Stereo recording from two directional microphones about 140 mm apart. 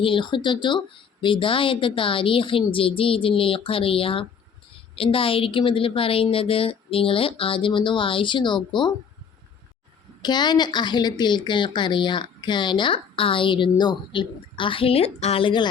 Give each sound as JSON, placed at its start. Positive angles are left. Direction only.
{"t": 0.0, "sound": "a woman's voice", "side_deg": 35}
{"t": 10.2, "sound": "a woman's voice", "side_deg": 30}